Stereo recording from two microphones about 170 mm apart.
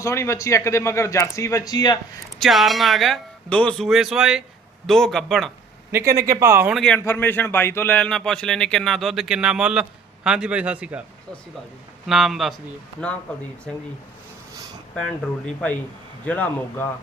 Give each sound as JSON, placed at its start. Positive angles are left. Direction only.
{"t": 0.0, "sound": "a man's voice", "side_deg": 15}
{"t": 2.4, "sound": "a man's voice", "side_deg": 0}
{"t": 5.9, "sound": "a man's voice", "side_deg": -15}
{"t": 6.7, "sound": "a man's voice", "side_deg": 5}
{"t": 12.0, "sound": "a man's voice", "side_deg": 0}
{"t": 14.9, "sound": "a man's voice", "side_deg": 5}